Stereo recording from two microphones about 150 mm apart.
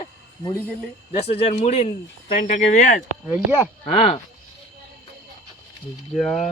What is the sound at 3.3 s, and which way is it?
Speech, 10° right (ahead or behind).